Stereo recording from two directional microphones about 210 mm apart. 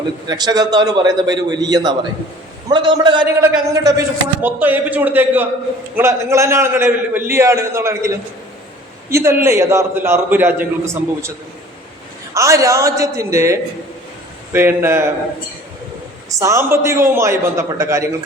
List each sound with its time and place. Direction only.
0.3 s a man's voice: 20° right (ahead or behind)
12.3 s a man's voice: 15° right (ahead or behind)
16.3 s a man's voice: 15° right (ahead or behind)